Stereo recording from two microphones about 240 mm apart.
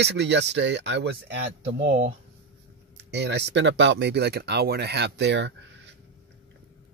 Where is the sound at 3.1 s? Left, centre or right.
Right.